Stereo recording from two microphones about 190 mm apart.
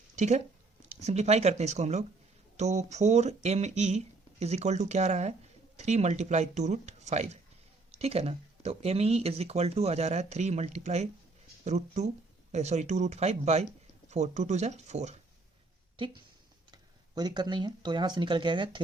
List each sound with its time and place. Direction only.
0.2 s speech: 35° right (ahead or behind)
16.7 s speech: 20° right (ahead or behind)